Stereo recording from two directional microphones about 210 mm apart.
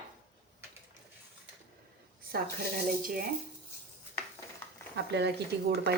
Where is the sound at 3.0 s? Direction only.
45° right (ahead or behind).